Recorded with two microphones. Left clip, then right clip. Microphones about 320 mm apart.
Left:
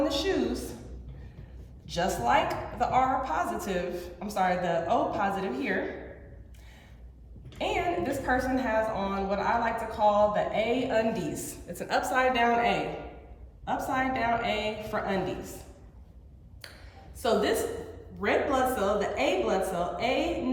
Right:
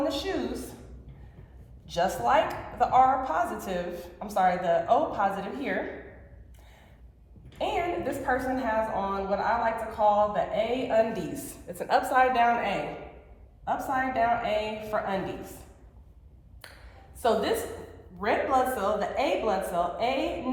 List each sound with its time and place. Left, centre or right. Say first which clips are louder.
0.0 s a woman's voice: left 2 dB; centre
1.9 s a woman's voice: right 1 dB; centre
7.6 s a woman's voice: even; centre
17.2 s a woman's voice: even; centre